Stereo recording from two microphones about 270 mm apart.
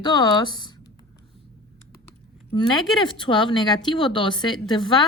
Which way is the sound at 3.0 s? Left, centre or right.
Centre.